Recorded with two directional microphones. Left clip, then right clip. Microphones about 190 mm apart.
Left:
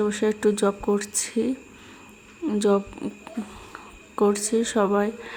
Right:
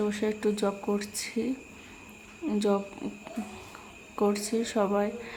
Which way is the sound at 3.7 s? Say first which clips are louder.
Left 7 dB; 20° left (ahead or behind).